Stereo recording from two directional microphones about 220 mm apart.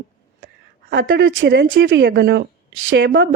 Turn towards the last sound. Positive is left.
turn(degrees=-55)  # may be behind; listen again after turning